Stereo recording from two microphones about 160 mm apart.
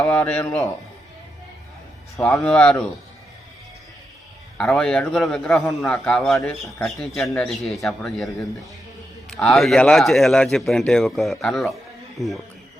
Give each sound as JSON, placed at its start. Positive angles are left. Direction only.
{"t": 0.1, "sound": "speech", "side_deg": 10}
{"t": 2.1, "sound": "speech", "side_deg": 20}
{"t": 2.4, "sound": "a man's voice", "side_deg": 5}
{"t": 4.5, "sound": "a man's voice", "side_deg": 5}
{"t": 9.3, "sound": "a man's voice", "side_deg": 5}